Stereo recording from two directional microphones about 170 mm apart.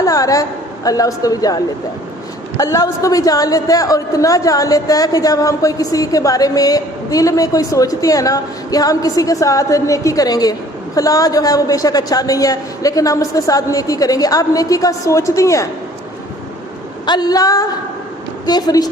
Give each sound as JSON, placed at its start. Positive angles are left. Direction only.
{"t": 0.0, "sound": "a sound", "side_deg": 20}
{"t": 0.9, "sound": "a woman's voice", "side_deg": 20}
{"t": 17.1, "sound": "a woman's voice", "side_deg": 25}